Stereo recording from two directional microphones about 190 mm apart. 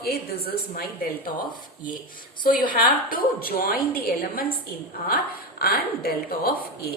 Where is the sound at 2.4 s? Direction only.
45° left (ahead or behind).